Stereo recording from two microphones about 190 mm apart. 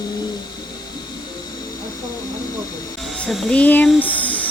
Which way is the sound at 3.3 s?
5° left (ahead or behind).